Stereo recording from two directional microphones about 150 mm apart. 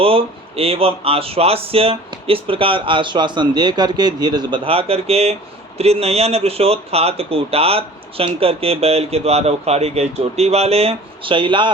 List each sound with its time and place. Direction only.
0.0 s speech: 40° right (ahead or behind)